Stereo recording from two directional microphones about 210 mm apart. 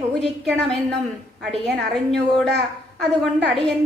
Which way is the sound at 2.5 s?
55° right (ahead or behind).